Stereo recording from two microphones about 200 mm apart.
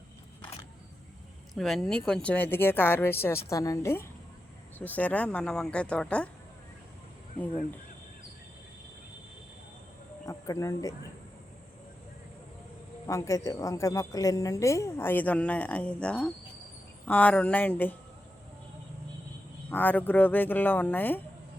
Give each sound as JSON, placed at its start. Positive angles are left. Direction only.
{"t": 1.5, "sound": "speech", "side_deg": 0}
{"t": 10.2, "sound": "speech", "side_deg": 15}
{"t": 13.1, "sound": "speech", "side_deg": 15}
{"t": 19.7, "sound": "speech", "side_deg": 10}